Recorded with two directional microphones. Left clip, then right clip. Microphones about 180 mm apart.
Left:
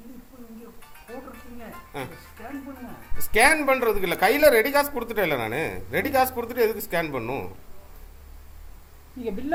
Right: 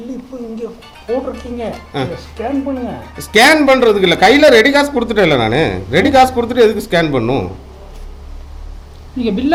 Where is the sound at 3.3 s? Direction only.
20° right (ahead or behind).